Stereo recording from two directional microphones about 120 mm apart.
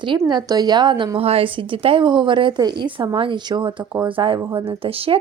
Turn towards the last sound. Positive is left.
turn(degrees=-50)  # may be behind; listen again after turning